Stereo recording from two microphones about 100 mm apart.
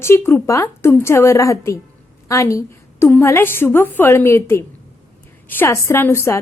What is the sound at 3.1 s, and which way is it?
A woman's voice, 25° left (ahead or behind).